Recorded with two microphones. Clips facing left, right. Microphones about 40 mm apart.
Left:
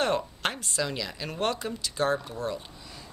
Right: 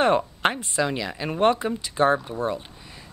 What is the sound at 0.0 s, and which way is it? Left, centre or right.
Speech, right.